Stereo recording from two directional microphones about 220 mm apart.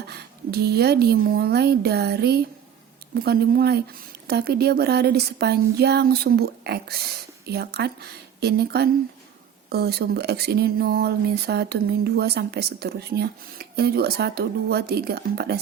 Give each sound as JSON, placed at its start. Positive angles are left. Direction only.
{"t": 0.1, "sound": "speech", "side_deg": -45}